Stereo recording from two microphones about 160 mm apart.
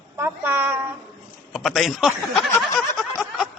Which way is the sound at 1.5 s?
Centre (ahead or behind).